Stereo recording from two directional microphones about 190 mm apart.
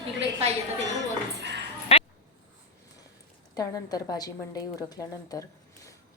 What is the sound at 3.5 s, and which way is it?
A woman's voice, 20° left (ahead or behind).